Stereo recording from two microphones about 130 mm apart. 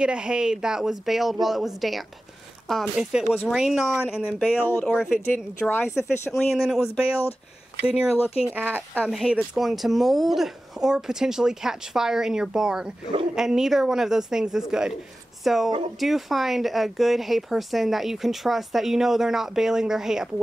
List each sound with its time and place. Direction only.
0.0 s speech: 5° right (ahead or behind)
4.5 s speech: 10° left (ahead or behind)
6.3 s speech: centre (ahead or behind)
9.0 s speech: 5° right (ahead or behind)